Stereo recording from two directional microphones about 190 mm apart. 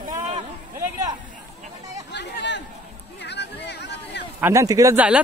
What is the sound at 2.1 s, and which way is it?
Chatter, 65° left (ahead or behind).